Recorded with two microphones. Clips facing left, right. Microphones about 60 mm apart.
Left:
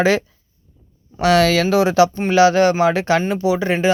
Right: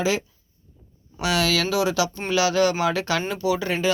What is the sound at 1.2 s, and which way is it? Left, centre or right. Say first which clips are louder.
Speech: left 8 dB; left.